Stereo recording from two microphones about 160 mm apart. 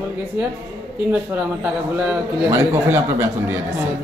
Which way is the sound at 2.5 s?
20° right (ahead or behind).